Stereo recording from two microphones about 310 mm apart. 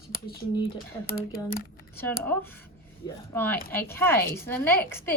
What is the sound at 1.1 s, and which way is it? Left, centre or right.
Speech, left.